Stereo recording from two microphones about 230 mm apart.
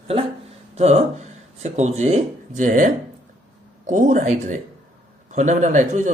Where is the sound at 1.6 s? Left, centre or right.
Right.